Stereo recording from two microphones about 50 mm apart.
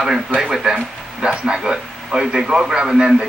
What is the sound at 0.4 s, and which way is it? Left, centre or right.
A man's voice, centre.